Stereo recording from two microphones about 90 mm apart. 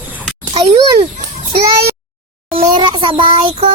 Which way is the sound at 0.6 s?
65° right (ahead or behind).